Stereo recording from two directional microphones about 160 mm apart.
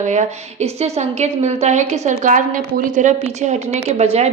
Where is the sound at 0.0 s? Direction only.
50° right (ahead or behind).